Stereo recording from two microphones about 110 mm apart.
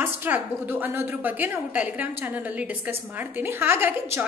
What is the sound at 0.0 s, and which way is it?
A woman's voice, 15° right (ahead or behind).